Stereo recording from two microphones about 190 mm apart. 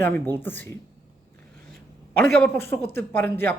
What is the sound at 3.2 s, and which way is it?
Speech, 10° left (ahead or behind).